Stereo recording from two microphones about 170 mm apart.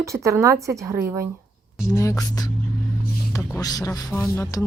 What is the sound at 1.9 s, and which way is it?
Speech, 20° left (ahead or behind).